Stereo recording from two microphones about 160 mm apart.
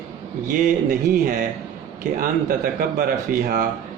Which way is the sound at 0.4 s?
50° right (ahead or behind).